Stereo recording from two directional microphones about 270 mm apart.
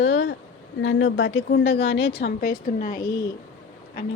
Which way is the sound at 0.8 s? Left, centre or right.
Left.